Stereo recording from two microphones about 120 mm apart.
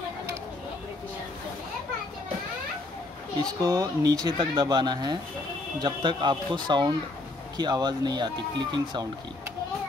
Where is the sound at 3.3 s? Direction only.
30° right (ahead or behind).